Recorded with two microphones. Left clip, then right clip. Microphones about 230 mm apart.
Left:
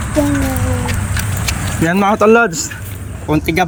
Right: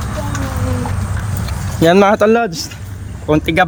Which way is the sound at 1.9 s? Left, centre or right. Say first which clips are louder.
Right 5 dB; centre.